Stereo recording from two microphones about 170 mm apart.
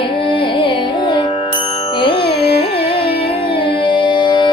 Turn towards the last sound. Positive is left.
turn(degrees=25)  # may be behind; listen again after turning